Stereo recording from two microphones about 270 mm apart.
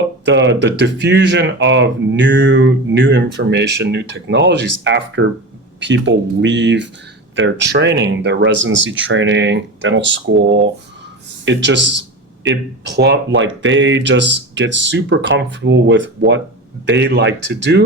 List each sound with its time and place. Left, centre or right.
0.3 s speech: right
11.4 s speech: right